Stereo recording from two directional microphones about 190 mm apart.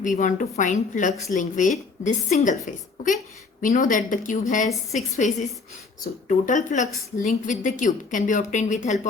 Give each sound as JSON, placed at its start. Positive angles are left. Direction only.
{"t": 0.0, "sound": "a woman's voice", "side_deg": 40}